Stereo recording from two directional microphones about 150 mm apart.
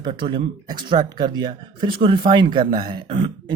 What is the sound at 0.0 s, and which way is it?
Speech, 35° right (ahead or behind).